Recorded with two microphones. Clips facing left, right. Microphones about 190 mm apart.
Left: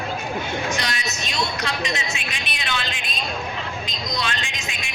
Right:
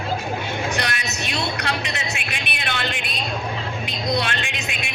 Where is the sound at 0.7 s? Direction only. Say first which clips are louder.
Right 2 dB; 60° right (ahead or behind).